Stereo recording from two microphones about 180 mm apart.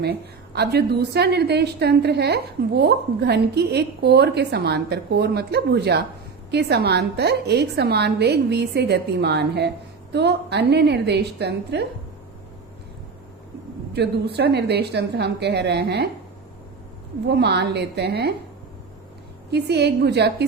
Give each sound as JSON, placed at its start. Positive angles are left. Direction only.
{"t": 0.0, "sound": "a woman's voice", "side_deg": -65}
{"t": 13.9, "sound": "a woman's voice", "side_deg": -65}
{"t": 17.2, "sound": "a woman's voice", "side_deg": -65}
{"t": 19.5, "sound": "a woman's voice", "side_deg": -70}